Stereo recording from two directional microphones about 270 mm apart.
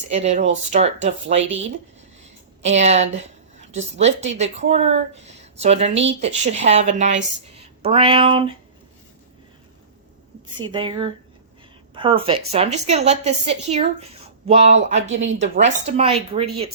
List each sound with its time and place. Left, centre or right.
0.1 s speech: right
2.6 s speech: right
10.6 s speech: centre
15.0 s speech: right
15.4 s speech: right